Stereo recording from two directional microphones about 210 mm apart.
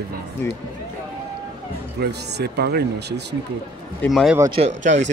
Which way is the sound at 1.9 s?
50° right (ahead or behind).